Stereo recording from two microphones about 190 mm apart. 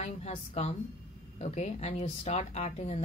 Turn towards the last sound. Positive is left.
turn(degrees=35)  # may be behind; listen again after turning